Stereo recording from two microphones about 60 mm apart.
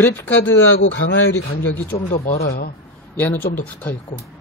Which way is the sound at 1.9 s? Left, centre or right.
Left.